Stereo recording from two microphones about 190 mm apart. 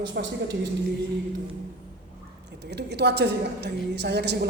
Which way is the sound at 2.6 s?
60° right (ahead or behind).